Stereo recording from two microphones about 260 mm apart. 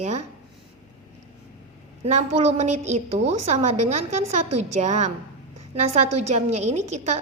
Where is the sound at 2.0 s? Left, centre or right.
Right.